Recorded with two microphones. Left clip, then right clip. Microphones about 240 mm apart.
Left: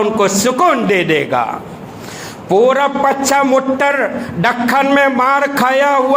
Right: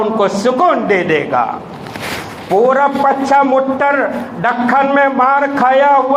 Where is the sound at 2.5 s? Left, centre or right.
Left.